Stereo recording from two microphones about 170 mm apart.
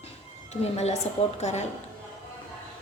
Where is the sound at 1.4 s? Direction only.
40° left (ahead or behind).